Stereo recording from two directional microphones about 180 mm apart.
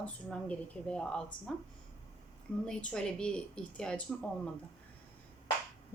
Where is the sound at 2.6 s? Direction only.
5° left (ahead or behind).